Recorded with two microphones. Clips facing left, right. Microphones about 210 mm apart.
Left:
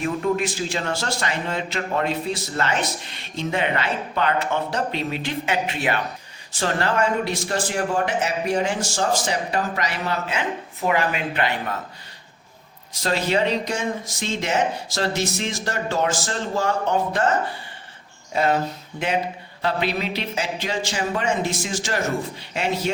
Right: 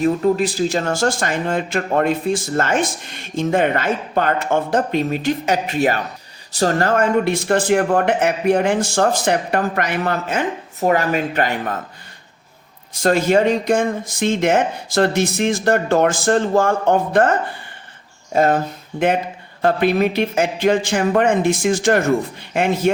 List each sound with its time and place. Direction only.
0.0 s a man's voice: 35° right (ahead or behind)
12.9 s a man's voice: 50° right (ahead or behind)
18.3 s a man's voice: 45° right (ahead or behind)